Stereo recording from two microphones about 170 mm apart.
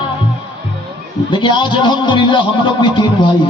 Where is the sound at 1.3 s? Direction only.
30° left (ahead or behind).